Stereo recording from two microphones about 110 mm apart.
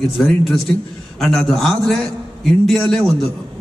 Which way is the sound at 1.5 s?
Centre (ahead or behind).